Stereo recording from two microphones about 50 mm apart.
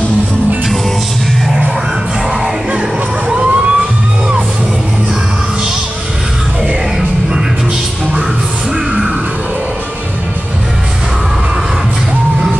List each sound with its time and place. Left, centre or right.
3.3 s emergency vehicle: centre